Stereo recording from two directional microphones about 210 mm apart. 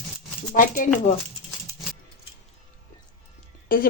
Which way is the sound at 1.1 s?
35° left (ahead or behind).